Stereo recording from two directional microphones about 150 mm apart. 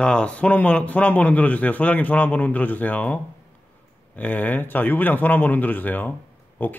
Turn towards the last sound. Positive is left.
turn(degrees=10)  # may be behind; listen again after turning